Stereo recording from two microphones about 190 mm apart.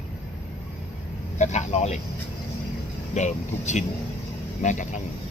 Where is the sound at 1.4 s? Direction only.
35° left (ahead or behind).